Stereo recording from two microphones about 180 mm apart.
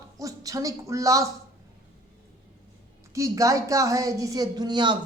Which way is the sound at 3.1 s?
15° right (ahead or behind).